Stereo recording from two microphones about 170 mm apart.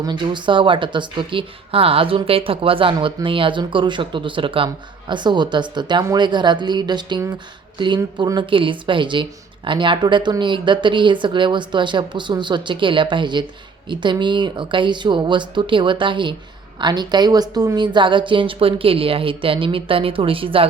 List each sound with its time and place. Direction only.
0.0 s speech: 25° right (ahead or behind)